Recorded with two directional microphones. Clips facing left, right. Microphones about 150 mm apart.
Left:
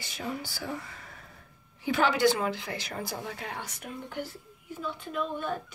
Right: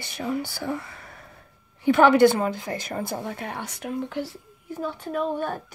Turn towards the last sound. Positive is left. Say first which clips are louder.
# right 6 dB
turn(degrees=-45)  # may be behind; listen again after turning